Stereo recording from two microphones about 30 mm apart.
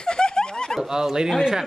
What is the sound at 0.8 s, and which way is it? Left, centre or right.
Speech, right.